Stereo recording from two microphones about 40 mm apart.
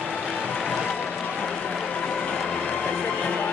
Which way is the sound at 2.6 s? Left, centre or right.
Left.